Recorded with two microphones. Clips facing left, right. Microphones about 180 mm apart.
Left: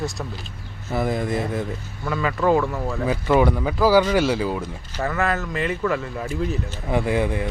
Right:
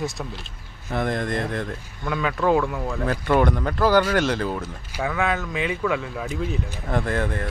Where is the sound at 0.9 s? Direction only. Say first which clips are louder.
Left 2 dB; 5° left (ahead or behind).